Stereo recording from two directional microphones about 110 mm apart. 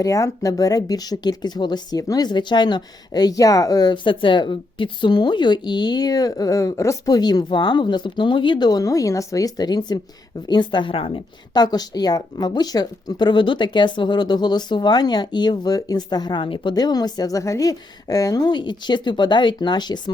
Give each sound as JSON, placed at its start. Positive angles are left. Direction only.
{"t": 0.0, "sound": "a woman's voice", "side_deg": 30}
{"t": 11.5, "sound": "speech", "side_deg": 40}